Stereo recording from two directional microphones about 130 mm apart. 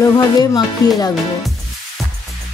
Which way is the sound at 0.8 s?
30° left (ahead or behind).